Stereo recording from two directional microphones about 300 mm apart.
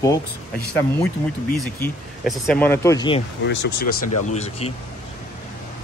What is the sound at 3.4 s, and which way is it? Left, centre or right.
Speech, left.